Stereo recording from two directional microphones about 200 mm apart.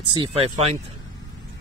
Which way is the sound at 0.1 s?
25° right (ahead or behind).